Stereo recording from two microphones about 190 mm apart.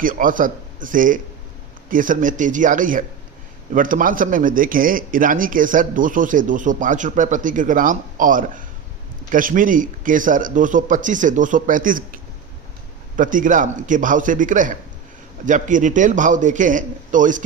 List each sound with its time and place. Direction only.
0.0 s a man's voice: 45° right (ahead or behind)